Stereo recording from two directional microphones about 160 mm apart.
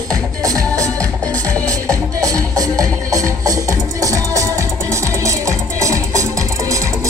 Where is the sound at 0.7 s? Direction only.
10° left (ahead or behind).